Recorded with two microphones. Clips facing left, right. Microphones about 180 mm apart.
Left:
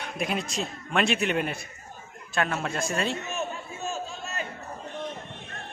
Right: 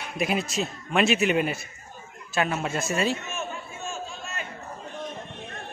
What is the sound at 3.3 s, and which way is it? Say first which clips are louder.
Music: left 1 dB; 35° left (ahead or behind).